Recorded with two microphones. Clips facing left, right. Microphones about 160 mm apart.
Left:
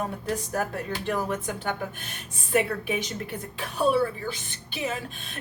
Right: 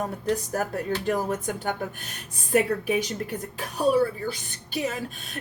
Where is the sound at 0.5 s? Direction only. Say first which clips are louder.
Right 2 dB; 40° right (ahead or behind).